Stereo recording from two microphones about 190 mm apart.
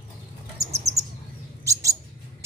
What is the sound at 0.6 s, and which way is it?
Bird, 35° right (ahead or behind).